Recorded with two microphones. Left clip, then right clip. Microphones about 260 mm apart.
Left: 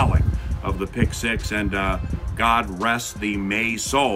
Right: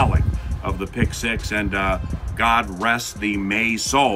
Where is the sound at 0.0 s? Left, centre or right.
Centre.